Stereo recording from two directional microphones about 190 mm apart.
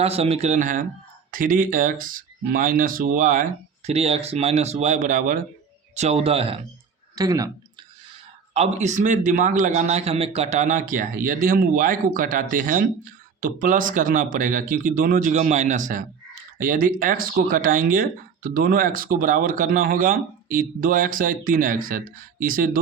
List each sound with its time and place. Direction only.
0.0 s speech: 30° right (ahead or behind)
3.8 s speech: 35° right (ahead or behind)
5.9 s speech: 35° right (ahead or behind)
7.2 s speech: 20° right (ahead or behind)
8.5 s speech: 35° right (ahead or behind)